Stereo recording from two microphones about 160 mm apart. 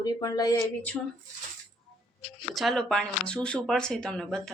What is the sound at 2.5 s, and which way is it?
Speech, centre (ahead or behind).